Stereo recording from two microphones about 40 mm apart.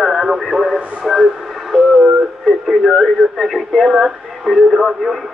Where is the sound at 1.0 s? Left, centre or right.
Centre.